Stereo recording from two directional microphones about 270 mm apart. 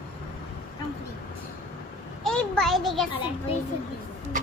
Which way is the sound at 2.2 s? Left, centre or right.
Centre.